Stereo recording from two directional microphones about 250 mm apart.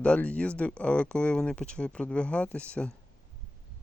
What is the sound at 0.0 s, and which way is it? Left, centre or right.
Speech, centre.